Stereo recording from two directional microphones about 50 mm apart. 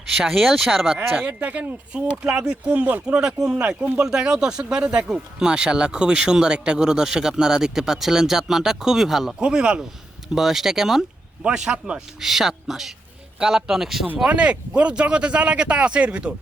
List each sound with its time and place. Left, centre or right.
0.2 s speech: centre
1.1 s speech: right
1.9 s speech: right
3.2 s speech: centre
9.4 s speech: centre
10.3 s speech: centre
11.4 s speech: centre
12.2 s speech: centre
14.3 s speech: right